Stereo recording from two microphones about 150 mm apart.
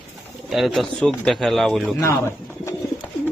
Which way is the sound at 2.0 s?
20° left (ahead or behind).